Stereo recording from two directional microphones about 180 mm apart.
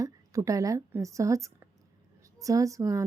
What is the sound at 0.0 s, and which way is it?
A woman's voice, 20° right (ahead or behind).